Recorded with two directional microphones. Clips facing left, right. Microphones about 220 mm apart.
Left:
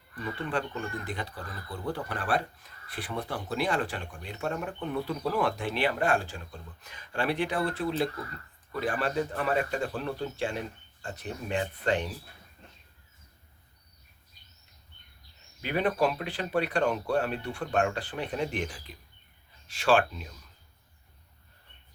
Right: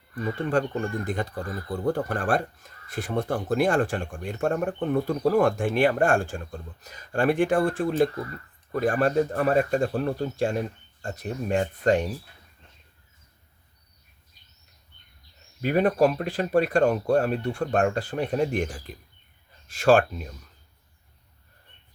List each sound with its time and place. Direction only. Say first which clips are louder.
0.2 s speech: right 7 dB; 45° right (ahead or behind)
15.6 s speech: right 6 dB; 45° right (ahead or behind)